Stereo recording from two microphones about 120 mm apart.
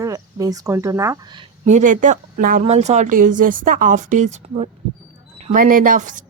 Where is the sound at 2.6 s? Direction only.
70° right (ahead or behind).